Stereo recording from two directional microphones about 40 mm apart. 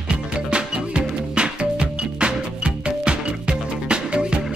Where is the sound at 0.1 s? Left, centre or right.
Right.